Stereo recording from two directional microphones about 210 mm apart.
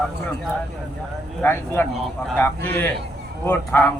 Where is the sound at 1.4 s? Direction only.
10° left (ahead or behind).